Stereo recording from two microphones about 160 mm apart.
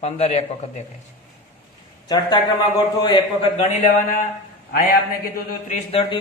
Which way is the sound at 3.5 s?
50° left (ahead or behind).